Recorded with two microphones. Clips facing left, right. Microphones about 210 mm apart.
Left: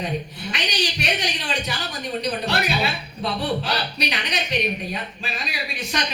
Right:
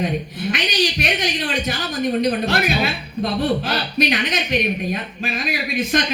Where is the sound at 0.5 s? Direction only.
50° right (ahead or behind).